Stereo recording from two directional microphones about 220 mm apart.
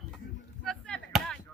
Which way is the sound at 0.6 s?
5° left (ahead or behind).